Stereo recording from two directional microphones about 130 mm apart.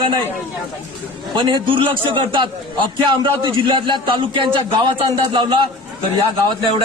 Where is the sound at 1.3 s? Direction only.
35° right (ahead or behind).